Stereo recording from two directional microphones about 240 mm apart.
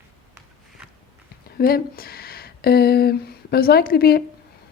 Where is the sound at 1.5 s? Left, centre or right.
Left.